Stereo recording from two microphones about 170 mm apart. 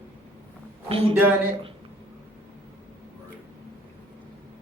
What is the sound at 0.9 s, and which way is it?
Speech, 30° right (ahead or behind).